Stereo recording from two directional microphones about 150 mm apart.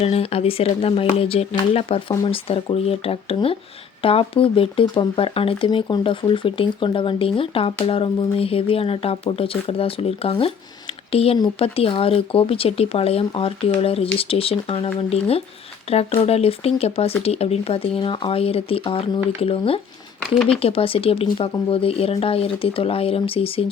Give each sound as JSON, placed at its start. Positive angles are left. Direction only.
{"t": 0.0, "sound": "speech", "side_deg": 40}